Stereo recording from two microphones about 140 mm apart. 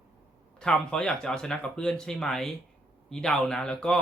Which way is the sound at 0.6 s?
5° left (ahead or behind).